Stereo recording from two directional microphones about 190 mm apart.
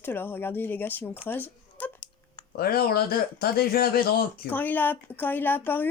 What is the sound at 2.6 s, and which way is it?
Speech, 55° left (ahead or behind).